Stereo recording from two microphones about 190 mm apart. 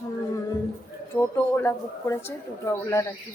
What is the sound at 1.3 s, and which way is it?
Speech, 15° left (ahead or behind).